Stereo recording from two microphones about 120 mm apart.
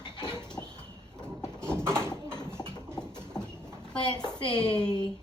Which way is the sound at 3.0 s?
35° left (ahead or behind).